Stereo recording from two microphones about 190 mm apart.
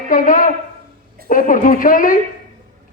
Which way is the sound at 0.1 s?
45° left (ahead or behind).